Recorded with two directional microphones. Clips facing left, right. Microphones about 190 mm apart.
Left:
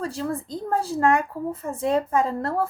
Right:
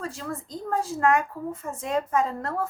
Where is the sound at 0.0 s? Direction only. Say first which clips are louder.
Left 6 dB; 30° left (ahead or behind).